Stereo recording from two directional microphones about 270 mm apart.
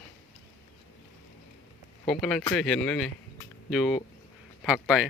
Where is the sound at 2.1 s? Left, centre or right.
Centre.